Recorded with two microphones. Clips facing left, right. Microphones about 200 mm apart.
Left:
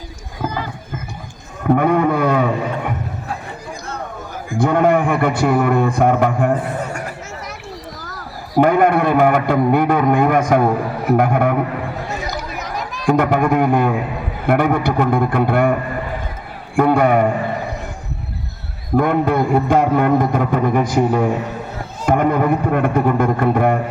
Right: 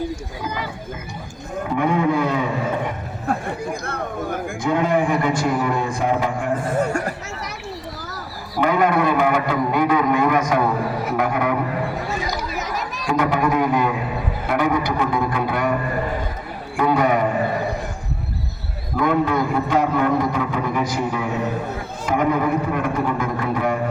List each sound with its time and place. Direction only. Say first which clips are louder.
1.6 s a sound: left 5 dB; 55° left (ahead or behind)
3.2 s chatter: right 5 dB; 55° right (ahead or behind)
4.5 s a man's voice: left 6 dB; 55° left (ahead or behind)
8.5 s a man's voice: left 5 dB; 50° left (ahead or behind)
12.5 s children playing: even; centre (ahead or behind)
13.1 s a man's voice: left 5 dB; 50° left (ahead or behind)
16.7 s a man's voice: left 5 dB; 50° left (ahead or behind)
18.9 s a man's voice: left 3 dB; 50° left (ahead or behind)